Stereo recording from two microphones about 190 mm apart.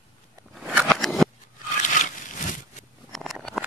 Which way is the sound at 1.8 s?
40° left (ahead or behind).